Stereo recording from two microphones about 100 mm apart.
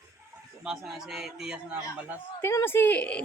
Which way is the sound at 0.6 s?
5° right (ahead or behind).